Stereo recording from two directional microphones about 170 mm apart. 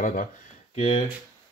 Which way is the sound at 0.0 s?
50° left (ahead or behind).